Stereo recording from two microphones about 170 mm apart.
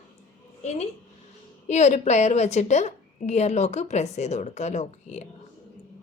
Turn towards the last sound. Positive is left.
turn(degrees=40)  # may be behind; listen again after turning